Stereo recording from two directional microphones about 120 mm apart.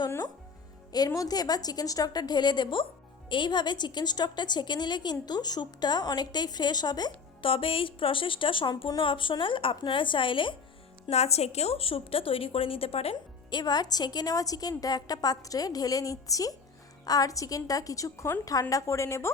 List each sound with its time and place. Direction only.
0.9 s a woman's voice: 30° left (ahead or behind)
7.4 s a woman's voice: 50° left (ahead or behind)
11.1 s a woman's voice: 60° left (ahead or behind)
13.5 s a woman's voice: 35° left (ahead or behind)